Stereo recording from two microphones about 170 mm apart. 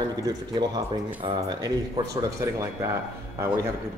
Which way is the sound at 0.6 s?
30° right (ahead or behind).